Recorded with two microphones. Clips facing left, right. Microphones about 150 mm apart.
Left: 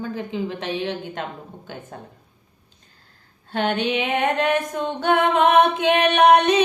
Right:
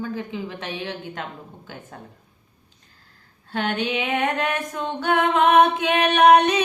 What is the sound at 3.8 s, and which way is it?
Speech, 20° left (ahead or behind).